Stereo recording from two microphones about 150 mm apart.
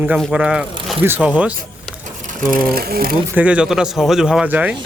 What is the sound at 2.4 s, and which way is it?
Speech, 70° right (ahead or behind).